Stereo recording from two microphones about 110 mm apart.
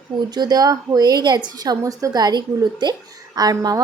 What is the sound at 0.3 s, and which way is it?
A woman's voice, 35° right (ahead or behind).